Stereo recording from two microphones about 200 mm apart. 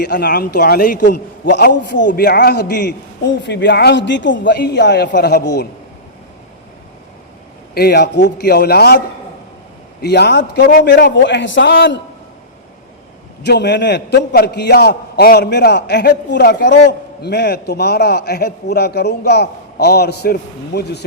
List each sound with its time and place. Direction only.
0.0 s a man's voice: 50° left (ahead or behind)
1.0 s a man's voice: 60° left (ahead or behind)
7.7 s a man's voice: 50° left (ahead or behind)
10.0 s a man's voice: 55° left (ahead or behind)
13.4 s a man's voice: 55° left (ahead or behind)